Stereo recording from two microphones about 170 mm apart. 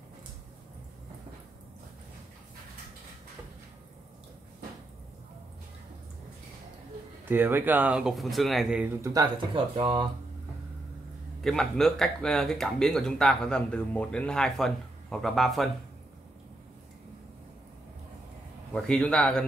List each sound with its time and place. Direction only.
7.2 s speech: 10° right (ahead or behind)
9.0 s speech: 25° right (ahead or behind)
11.4 s speech: centre (ahead or behind)
18.7 s speech: 5° left (ahead or behind)